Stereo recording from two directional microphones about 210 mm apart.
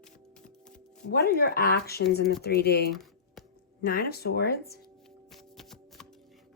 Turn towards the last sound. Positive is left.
turn(degrees=0)  # may be behind; listen again after turning